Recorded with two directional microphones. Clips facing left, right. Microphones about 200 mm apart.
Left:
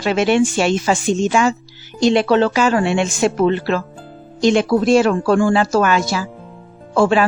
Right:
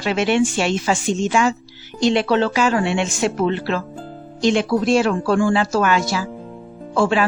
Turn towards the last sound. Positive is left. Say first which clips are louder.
# left 3 dB
turn(degrees=45)  # may be behind; listen again after turning